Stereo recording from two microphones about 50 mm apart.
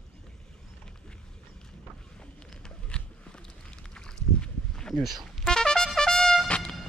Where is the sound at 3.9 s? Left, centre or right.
Centre.